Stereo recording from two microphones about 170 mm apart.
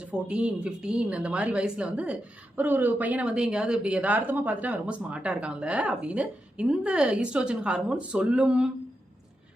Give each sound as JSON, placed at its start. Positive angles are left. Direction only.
{"t": 0.0, "sound": "speech", "side_deg": -5}